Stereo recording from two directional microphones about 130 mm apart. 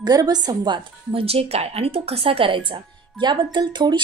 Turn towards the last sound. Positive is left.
turn(degrees=-35)  # may be behind; listen again after turning